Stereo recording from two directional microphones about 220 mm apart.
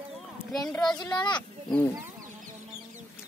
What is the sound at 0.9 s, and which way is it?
Speech, 20° left (ahead or behind).